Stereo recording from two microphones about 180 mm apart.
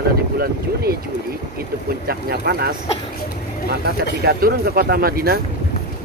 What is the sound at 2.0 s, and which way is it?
Speech, 60° right (ahead or behind).